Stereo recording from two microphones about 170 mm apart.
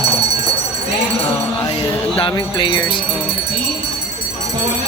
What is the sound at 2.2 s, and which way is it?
Speech, 30° left (ahead or behind).